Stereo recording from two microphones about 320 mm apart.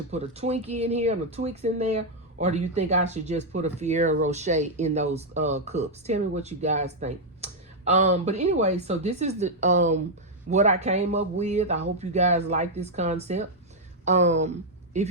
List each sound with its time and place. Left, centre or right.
0.1 s speech: centre